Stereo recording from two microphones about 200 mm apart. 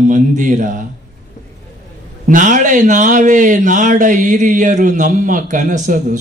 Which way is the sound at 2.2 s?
40° right (ahead or behind).